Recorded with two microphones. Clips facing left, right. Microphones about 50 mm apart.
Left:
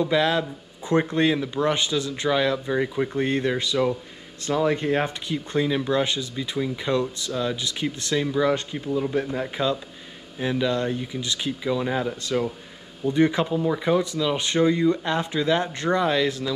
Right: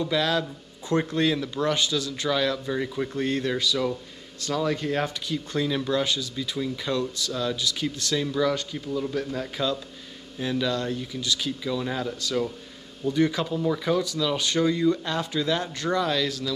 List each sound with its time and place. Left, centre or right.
0.0 s speech: left